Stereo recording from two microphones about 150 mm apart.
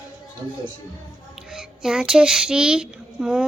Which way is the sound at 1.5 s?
5° right (ahead or behind).